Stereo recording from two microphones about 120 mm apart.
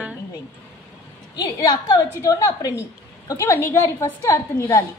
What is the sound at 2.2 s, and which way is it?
A woman's voice, 25° left (ahead or behind).